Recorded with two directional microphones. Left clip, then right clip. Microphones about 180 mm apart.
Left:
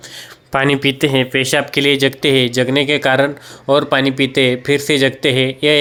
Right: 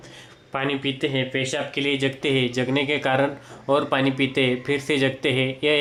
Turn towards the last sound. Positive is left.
turn(degrees=25)  # may be behind; listen again after turning